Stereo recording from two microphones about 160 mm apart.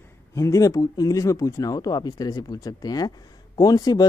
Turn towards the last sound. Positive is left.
turn(degrees=25)  # may be behind; listen again after turning